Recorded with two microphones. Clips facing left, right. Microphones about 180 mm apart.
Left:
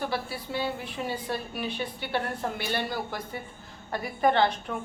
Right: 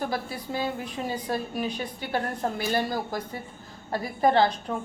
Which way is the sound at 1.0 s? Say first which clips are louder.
Right 2 dB; 40° right (ahead or behind).